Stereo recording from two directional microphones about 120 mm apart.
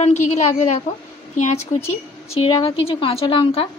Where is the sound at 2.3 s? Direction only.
50° left (ahead or behind).